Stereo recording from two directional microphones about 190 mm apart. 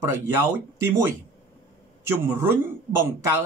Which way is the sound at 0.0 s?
15° right (ahead or behind).